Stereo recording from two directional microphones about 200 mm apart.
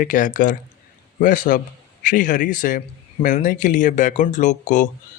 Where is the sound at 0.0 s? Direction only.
40° left (ahead or behind).